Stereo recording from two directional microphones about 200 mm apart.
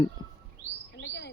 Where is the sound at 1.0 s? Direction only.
60° left (ahead or behind).